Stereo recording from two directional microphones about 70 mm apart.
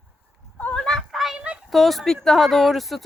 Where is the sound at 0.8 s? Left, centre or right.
Centre.